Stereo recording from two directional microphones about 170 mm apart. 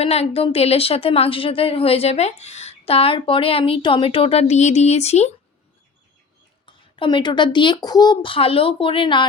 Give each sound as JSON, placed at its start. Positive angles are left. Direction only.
{"t": 0.0, "sound": "a woman's voice", "side_deg": 35}
{"t": 6.7, "sound": "speech", "side_deg": 30}